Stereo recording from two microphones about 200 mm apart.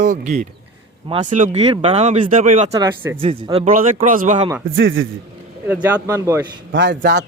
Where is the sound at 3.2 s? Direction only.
30° right (ahead or behind).